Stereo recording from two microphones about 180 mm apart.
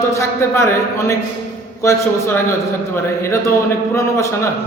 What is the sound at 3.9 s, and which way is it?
Speech, 15° left (ahead or behind).